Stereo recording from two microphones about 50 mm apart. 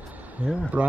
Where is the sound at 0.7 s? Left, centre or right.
Right.